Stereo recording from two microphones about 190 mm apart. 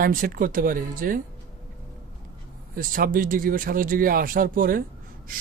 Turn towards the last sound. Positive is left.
turn(degrees=-50)  # may be behind; listen again after turning